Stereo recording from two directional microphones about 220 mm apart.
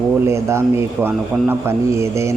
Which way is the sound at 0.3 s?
10° right (ahead or behind).